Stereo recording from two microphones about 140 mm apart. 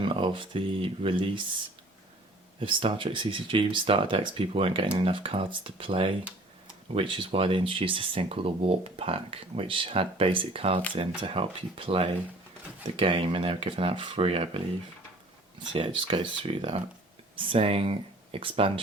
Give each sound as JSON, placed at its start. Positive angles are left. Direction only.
{"t": 0.0, "sound": "speech", "side_deg": -40}
{"t": 2.6, "sound": "speech", "side_deg": -40}